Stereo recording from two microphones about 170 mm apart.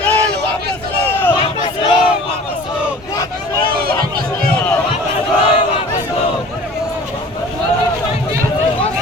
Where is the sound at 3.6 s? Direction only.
60° right (ahead or behind).